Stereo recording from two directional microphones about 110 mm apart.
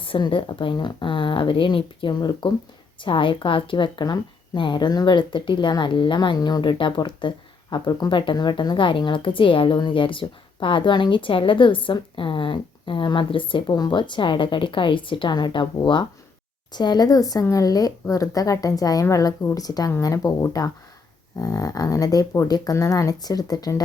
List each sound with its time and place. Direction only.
0.0 s a woman's voice: 50° left (ahead or behind); by 23.8 s 35° left (ahead or behind)